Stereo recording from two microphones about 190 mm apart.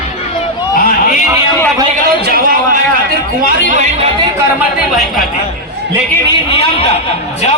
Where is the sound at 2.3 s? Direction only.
50° right (ahead or behind).